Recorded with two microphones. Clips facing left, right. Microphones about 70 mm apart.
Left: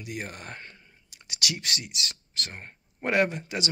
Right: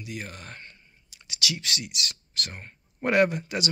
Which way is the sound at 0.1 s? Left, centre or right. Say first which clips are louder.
Left 2 dB; left.